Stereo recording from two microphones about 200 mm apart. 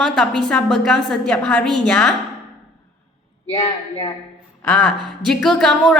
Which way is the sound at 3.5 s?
30° left (ahead or behind).